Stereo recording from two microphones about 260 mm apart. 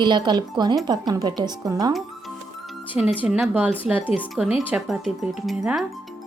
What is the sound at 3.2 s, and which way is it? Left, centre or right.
Speech, centre.